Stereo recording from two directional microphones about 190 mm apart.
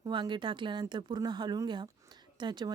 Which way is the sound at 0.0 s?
25° right (ahead or behind).